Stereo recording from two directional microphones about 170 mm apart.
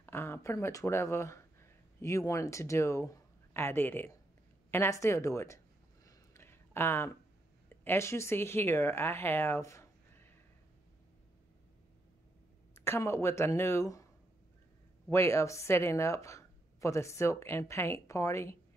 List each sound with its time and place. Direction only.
0.0 s speech: 15° left (ahead or behind)
6.0 s a sound: 15° left (ahead or behind)
7.8 s speech: 15° left (ahead or behind)
12.7 s speech: 15° left (ahead or behind)
15.0 s speech: 15° left (ahead or behind)